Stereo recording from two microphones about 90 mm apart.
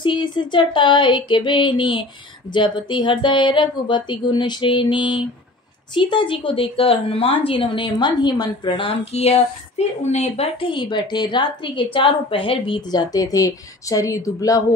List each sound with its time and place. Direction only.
0.0 s a woman's voice: 60° left (ahead or behind)
7.9 s a woman's voice: 50° left (ahead or behind)
10.4 s a woman's voice: 75° left (ahead or behind); by 14.6 s 40° left (ahead or behind)